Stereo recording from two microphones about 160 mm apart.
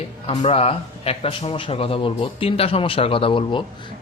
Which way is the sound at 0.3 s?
40° left (ahead or behind).